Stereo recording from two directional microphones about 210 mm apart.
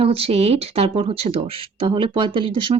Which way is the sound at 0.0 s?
30° right (ahead or behind).